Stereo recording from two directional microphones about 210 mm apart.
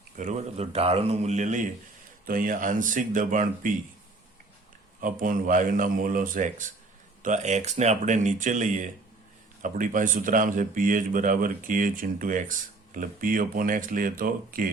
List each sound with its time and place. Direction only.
0.2 s speech: 35° right (ahead or behind)
4.9 s speech: 40° right (ahead or behind)